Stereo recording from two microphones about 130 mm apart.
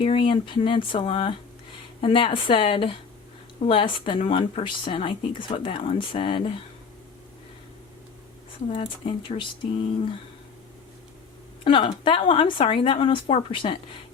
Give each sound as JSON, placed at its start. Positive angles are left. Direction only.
{"t": 0.0, "sound": "speech", "side_deg": 40}
{"t": 8.7, "sound": "speech", "side_deg": 50}
{"t": 11.6, "sound": "speech", "side_deg": 40}